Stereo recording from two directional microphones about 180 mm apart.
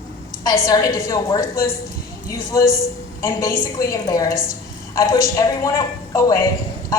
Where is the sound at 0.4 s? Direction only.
20° left (ahead or behind).